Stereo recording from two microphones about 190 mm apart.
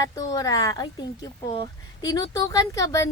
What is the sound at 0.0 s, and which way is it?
Speech, 20° left (ahead or behind).